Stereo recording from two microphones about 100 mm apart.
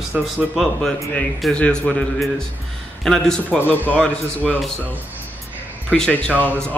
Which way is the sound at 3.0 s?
5° left (ahead or behind).